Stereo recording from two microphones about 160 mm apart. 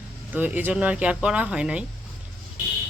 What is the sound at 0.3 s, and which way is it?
Speech, 10° right (ahead or behind).